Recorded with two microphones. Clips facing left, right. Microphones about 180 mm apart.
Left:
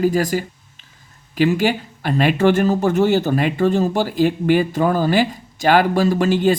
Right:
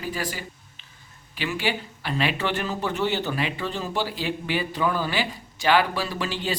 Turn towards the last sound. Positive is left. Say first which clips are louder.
# left 13 dB
turn(degrees=50)  # may be behind; listen again after turning